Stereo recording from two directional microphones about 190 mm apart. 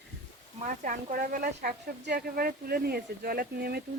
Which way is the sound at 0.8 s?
45° right (ahead or behind).